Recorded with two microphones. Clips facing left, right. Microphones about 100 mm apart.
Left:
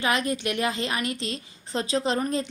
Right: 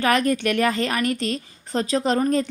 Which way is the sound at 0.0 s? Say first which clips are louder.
Right 6 dB; 50° right (ahead or behind).